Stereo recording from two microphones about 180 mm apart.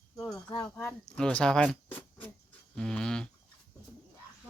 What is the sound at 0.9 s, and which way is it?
Speech, 5° left (ahead or behind).